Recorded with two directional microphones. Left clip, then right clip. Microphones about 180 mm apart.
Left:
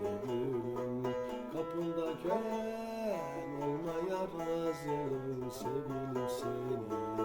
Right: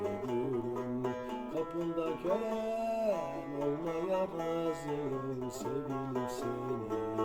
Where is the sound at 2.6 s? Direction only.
15° right (ahead or behind).